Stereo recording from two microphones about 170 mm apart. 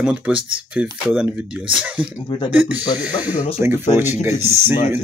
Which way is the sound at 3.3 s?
40° left (ahead or behind).